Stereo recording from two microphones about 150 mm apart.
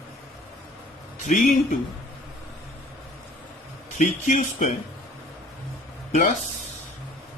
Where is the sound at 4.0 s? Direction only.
55° left (ahead or behind).